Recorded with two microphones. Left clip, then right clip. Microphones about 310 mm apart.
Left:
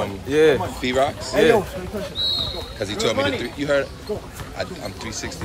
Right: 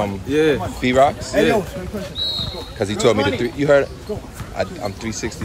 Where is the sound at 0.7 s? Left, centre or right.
Centre.